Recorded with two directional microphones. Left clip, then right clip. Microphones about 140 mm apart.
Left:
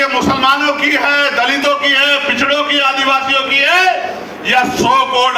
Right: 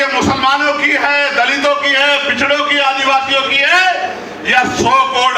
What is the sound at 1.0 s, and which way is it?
A man's voice, 45° left (ahead or behind).